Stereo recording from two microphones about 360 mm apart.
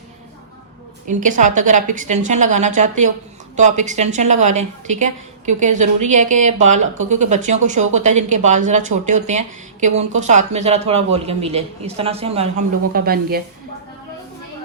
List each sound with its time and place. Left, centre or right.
1.0 s a woman's voice: right